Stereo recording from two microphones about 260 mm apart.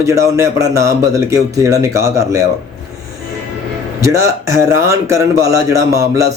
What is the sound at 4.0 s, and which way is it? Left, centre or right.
A man's voice, centre.